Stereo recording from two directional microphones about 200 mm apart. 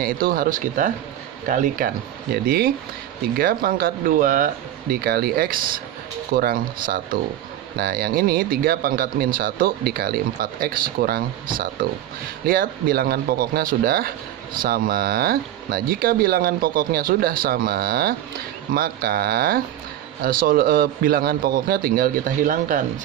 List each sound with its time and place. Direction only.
0.0 s speech: 45° right (ahead or behind)
12.4 s speech: 45° right (ahead or behind)